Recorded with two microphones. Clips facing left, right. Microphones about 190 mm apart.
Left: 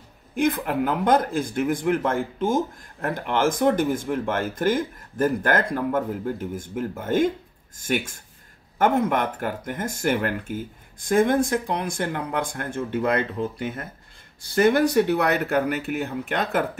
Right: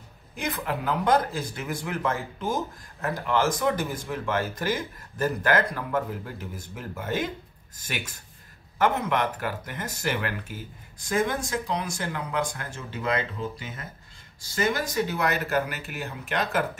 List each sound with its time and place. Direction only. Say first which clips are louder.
0.4 s speech: left 8 dB; 50° left (ahead or behind)